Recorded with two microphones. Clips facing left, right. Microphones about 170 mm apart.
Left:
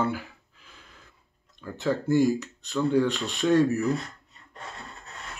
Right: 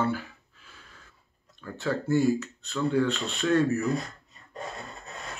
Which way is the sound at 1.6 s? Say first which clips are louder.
Left 3 dB; 15° left (ahead or behind).